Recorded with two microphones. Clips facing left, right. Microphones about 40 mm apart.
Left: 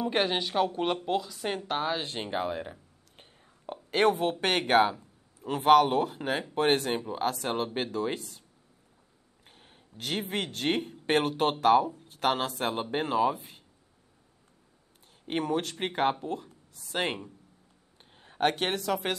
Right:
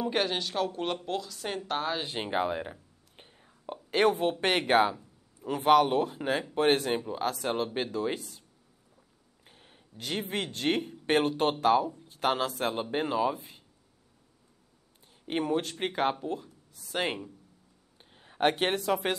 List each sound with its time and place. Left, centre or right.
0.1 s speech: centre
2.0 s whispering: centre
3.7 s speech: centre
4.7 s a sound: centre
5.9 s speech: centre
6.8 s speech: centre
7.1 s speech: centre
9.5 s speech: centre
15.3 s speech: centre
18.1 s a sound: centre
18.4 s speech: centre